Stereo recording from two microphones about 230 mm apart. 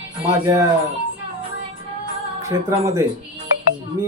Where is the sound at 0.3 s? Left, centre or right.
Centre.